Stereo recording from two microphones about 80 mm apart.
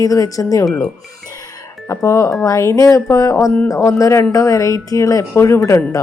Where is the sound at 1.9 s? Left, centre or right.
Left.